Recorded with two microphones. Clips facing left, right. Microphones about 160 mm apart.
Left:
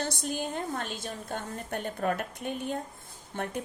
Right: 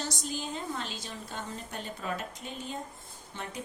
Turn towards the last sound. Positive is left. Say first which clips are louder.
# left 6 dB
turn(degrees=55)  # may be behind; listen again after turning